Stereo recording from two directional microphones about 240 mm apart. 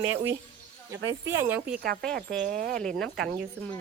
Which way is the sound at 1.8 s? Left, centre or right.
Right.